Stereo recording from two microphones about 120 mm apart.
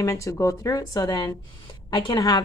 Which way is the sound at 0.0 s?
25° left (ahead or behind).